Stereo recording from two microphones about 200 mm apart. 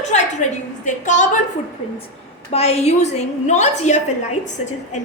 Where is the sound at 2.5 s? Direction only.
30° left (ahead or behind).